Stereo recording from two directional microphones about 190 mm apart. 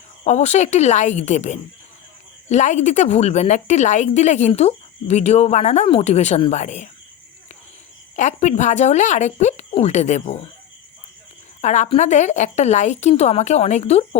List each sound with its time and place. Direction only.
0.3 s a woman's voice: 35° left (ahead or behind)
8.1 s a woman's voice: 40° left (ahead or behind)
11.6 s a woman's voice: 40° left (ahead or behind)